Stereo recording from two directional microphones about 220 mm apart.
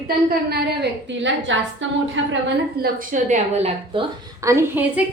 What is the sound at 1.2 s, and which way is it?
A woman's voice, 55° right (ahead or behind).